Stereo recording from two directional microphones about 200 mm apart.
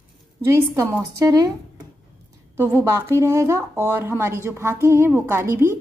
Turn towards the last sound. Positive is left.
turn(degrees=-10)  # may be behind; listen again after turning